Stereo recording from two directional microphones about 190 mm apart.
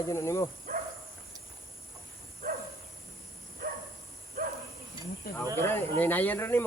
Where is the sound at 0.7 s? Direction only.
45° right (ahead or behind).